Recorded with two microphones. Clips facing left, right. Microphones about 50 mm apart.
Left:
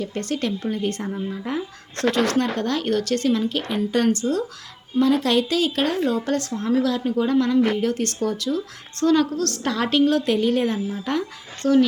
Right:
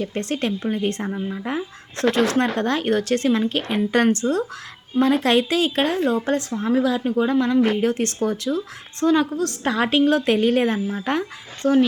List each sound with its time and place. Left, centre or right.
0.0 s a woman's voice: right
9.0 s a woman's voice: centre; by 11.3 s right
11.6 s speech: right